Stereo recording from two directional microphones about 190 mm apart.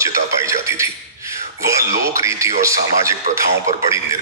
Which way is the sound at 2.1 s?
15° right (ahead or behind).